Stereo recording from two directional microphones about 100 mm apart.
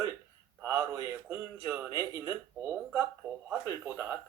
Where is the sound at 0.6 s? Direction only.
30° right (ahead or behind).